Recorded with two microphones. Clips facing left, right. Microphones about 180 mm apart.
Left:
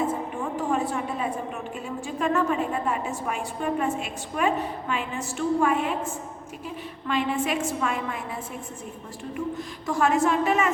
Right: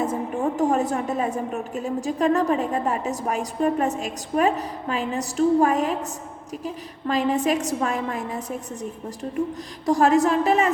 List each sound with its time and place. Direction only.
0.0 s a woman's voice: 40° right (ahead or behind)
9.8 s a woman's voice: 35° right (ahead or behind)